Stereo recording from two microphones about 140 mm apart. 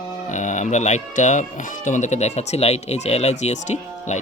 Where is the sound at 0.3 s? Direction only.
60° left (ahead or behind).